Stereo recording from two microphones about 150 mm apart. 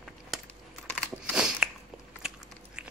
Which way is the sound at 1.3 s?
5° right (ahead or behind).